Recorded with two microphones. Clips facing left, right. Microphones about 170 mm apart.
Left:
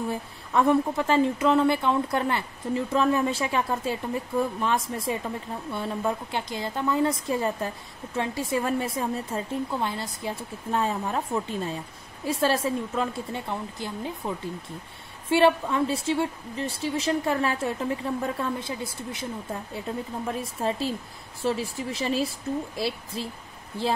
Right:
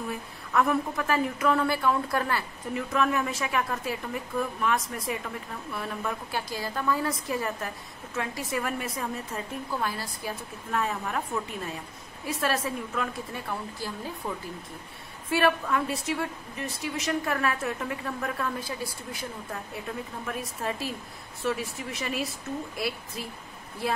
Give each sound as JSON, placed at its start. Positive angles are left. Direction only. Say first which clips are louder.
{"t": 0.1, "sound": "a woman's voice", "louder": "left 2 dB", "side_deg": 30}
{"t": 20.2, "sound": "a woman's voice", "louder": "left 4 dB", "side_deg": 30}